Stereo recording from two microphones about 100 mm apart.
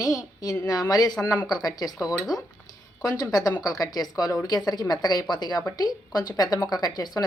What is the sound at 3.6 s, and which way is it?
A woman's voice, 35° left (ahead or behind).